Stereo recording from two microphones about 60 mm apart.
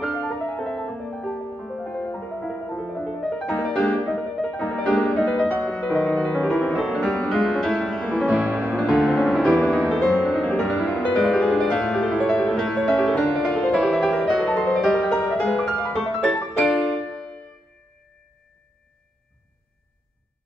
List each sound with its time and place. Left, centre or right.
0.0 s music: centre
2.4 s music: centre
8.0 s music: centre
8.3 s music: centre
8.5 s music: centre